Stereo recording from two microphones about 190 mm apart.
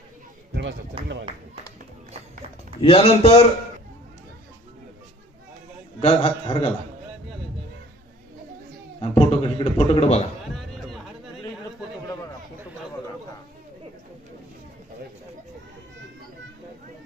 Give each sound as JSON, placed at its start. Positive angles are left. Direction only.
{"t": 0.5, "sound": "speech", "side_deg": -65}
{"t": 2.8, "sound": "a man's voice", "side_deg": 30}
{"t": 6.0, "sound": "a man's voice", "side_deg": 35}
{"t": 9.0, "sound": "a man's voice", "side_deg": 30}
{"t": 10.5, "sound": "a sound", "side_deg": 0}